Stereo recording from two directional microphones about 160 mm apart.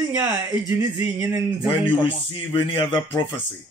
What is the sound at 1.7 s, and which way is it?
A man's voice, 30° left (ahead or behind).